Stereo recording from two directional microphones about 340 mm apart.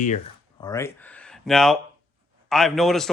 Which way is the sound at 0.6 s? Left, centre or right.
Centre.